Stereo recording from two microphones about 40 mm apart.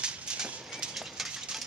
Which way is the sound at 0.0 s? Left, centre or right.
Centre.